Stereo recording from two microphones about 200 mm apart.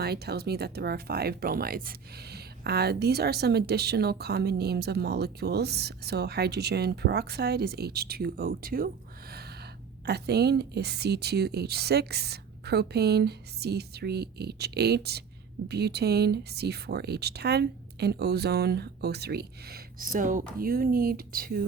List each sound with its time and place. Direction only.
0.0 s speech: 55° right (ahead or behind)
10.1 s speech: 55° right (ahead or behind)